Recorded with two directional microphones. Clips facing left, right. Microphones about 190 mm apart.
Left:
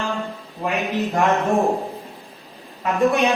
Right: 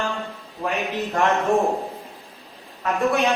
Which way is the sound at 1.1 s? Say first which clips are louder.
Even; 15° left (ahead or behind).